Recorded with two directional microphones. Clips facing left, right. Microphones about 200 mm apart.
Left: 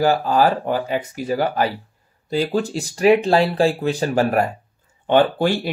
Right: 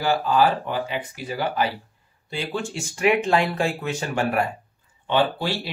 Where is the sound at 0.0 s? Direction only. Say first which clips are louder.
Left 3 dB; 45° left (ahead or behind).